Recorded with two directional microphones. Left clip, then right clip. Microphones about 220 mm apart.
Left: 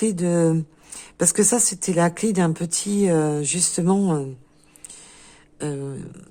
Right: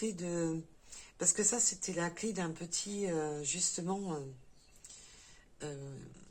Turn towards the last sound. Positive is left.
turn(degrees=50)  # may be behind; listen again after turning